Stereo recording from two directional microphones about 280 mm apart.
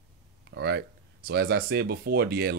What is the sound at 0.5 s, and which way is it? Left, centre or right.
Speech, right.